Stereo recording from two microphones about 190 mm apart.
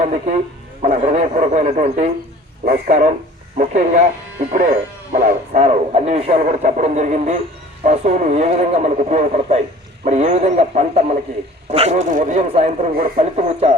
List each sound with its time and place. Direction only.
0.0 s speech: 40° right (ahead or behind)
2.6 s speech: 50° right (ahead or behind)